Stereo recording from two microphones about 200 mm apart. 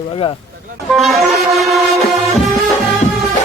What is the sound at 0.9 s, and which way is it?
Vehicle, centre (ahead or behind).